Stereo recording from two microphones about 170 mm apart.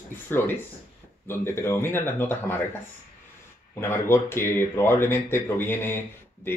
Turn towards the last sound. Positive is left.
turn(degrees=15)  # may be behind; listen again after turning